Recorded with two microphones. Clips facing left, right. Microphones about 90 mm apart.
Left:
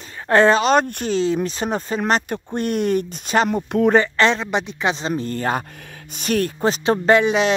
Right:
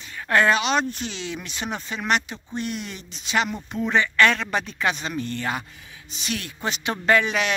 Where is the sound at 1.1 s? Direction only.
40° left (ahead or behind).